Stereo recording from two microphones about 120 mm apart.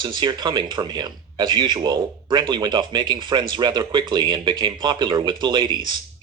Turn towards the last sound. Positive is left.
turn(degrees=-40)  # may be behind; listen again after turning